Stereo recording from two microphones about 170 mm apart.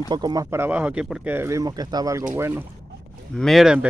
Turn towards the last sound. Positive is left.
turn(degrees=0)  # may be behind; listen again after turning